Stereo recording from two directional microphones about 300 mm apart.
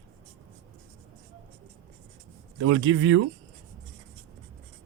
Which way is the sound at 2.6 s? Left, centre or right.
Right.